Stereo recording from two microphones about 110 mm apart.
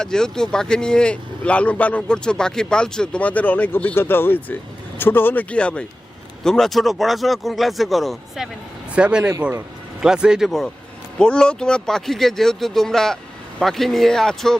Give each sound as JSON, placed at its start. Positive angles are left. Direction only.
{"t": 0.0, "sound": "speech", "side_deg": 5}
{"t": 8.9, "sound": "speech", "side_deg": -10}
{"t": 10.0, "sound": "speech", "side_deg": -5}